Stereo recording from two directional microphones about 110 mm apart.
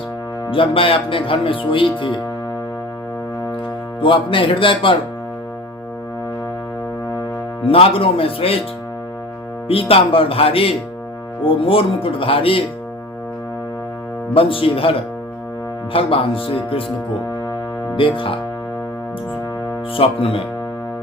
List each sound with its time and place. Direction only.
0.5 s speech: 55° left (ahead or behind)
4.0 s speech: 50° left (ahead or behind)
7.6 s speech: 60° left (ahead or behind)
9.6 s speech: 60° left (ahead or behind)
14.3 s speech: 55° left (ahead or behind)
17.9 s speech: 50° left (ahead or behind)
20.0 s speech: 55° left (ahead or behind)